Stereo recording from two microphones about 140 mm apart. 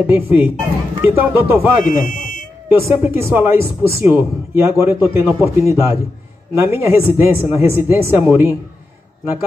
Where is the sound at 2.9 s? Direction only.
15° right (ahead or behind).